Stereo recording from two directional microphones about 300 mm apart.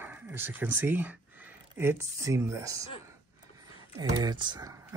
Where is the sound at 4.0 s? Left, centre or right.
Centre.